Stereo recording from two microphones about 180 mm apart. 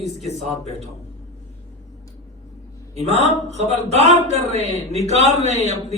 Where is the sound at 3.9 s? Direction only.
40° right (ahead or behind).